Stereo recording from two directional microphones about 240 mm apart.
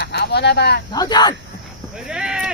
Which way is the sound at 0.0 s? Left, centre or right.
Left.